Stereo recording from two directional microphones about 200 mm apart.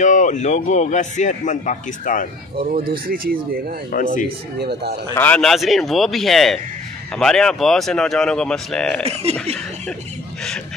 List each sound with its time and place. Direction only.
0.0 s a man's voice: 40° left (ahead or behind)
2.5 s a man's voice: 45° right (ahead or behind)
3.9 s a man's voice: 40° left (ahead or behind)
4.6 s a man's voice: 55° right (ahead or behind)
5.1 s speech: 10° left (ahead or behind)
9.0 s speech: 30° right (ahead or behind)